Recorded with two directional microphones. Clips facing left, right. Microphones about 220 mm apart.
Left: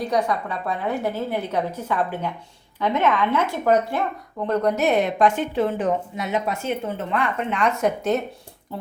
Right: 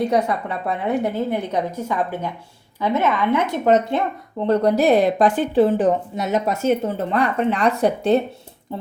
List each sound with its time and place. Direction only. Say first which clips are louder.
0.0 s a woman's voice: right 3 dB; 25° right (ahead or behind)